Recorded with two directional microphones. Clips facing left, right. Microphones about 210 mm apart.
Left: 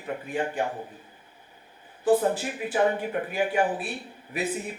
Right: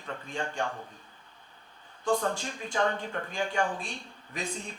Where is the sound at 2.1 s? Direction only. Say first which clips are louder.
Left 6 dB; 5° left (ahead or behind).